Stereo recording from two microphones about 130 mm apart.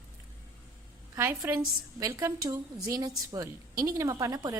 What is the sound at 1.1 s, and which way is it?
A woman's voice, 25° right (ahead or behind).